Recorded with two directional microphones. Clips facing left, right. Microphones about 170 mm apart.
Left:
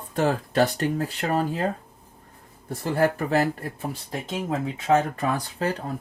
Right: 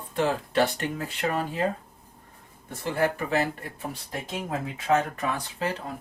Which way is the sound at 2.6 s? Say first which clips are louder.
Left 3 dB; 35° left (ahead or behind).